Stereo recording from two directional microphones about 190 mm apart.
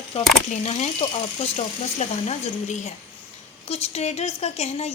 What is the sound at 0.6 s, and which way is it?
A woman's voice, 35° left (ahead or behind).